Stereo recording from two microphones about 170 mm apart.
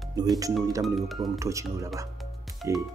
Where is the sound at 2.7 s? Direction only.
15° right (ahead or behind).